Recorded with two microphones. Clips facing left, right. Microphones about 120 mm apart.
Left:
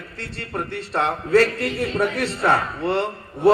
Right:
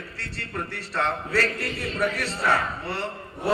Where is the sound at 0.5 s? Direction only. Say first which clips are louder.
Left 5 dB; 40° left (ahead or behind).